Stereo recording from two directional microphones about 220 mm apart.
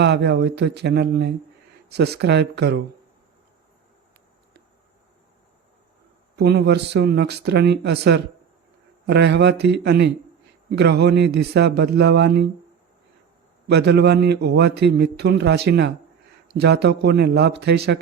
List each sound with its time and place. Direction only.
0.0 s a man's voice: 50° right (ahead or behind)
6.3 s a man's voice: 50° right (ahead or behind)
13.7 s a man's voice: 50° right (ahead or behind)